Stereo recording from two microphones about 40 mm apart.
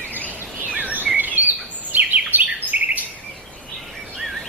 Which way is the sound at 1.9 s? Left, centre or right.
Right.